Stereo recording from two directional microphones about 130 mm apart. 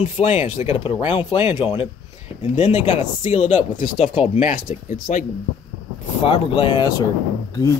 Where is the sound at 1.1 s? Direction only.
45° left (ahead or behind).